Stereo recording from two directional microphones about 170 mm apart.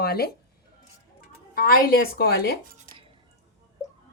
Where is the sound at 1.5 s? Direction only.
60° left (ahead or behind).